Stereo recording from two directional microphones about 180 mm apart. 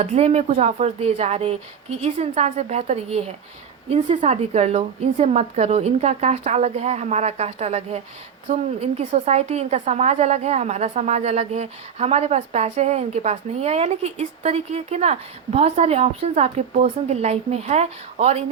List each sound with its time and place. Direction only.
0.0 s a woman's voice: 35° right (ahead or behind)